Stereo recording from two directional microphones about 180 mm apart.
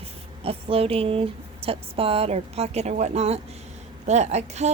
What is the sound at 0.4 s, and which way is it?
A woman's voice, 30° right (ahead or behind).